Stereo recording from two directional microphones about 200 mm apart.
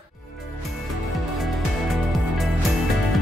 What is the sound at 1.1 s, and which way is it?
Music, centre (ahead or behind).